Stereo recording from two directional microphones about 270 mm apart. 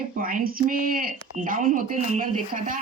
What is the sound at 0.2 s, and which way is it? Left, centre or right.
Speech, right.